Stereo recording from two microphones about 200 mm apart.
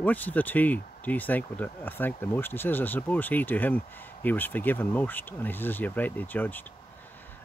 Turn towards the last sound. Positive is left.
turn(degrees=10)  # may be behind; listen again after turning